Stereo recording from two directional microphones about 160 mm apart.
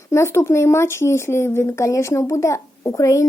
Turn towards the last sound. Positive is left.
turn(degrees=20)  # may be behind; listen again after turning